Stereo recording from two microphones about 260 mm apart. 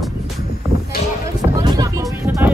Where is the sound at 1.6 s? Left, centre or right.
Centre.